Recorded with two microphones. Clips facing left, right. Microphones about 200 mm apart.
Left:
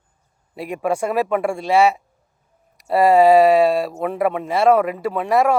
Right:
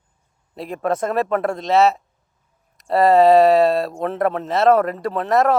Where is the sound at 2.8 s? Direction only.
Centre (ahead or behind).